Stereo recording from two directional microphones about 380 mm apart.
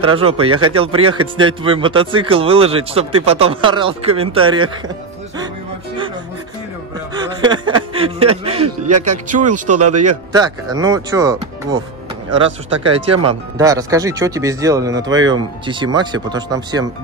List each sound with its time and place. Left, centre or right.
0.0 s speech: centre
7.2 s a sound: centre
9.0 s speech: centre
12.9 s speech: centre